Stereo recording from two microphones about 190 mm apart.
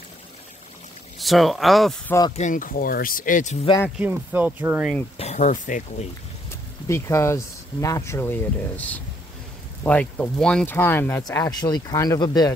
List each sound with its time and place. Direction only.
1.2 s speech: centre (ahead or behind)
2.3 s speech: 40° left (ahead or behind)
4.0 s speech: 10° right (ahead or behind)
5.1 s speech: 35° left (ahead or behind)
6.9 s speech: 15° left (ahead or behind)